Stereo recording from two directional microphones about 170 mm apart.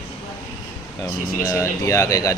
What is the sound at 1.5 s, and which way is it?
Speech, 15° left (ahead or behind).